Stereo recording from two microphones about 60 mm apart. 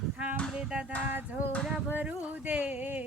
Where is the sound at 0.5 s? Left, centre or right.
Centre.